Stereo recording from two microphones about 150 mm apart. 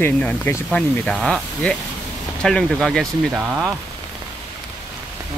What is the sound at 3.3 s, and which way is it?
Speech, 10° right (ahead or behind).